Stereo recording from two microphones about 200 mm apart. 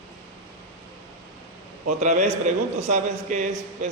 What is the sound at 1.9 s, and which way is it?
A man's voice, 35° right (ahead or behind).